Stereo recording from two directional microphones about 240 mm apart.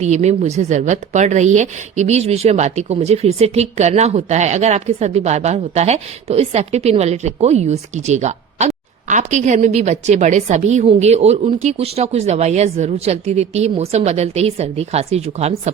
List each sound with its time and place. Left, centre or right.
0.0 s a woman's voice: right